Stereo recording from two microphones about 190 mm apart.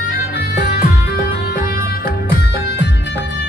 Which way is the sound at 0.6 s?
55° left (ahead or behind).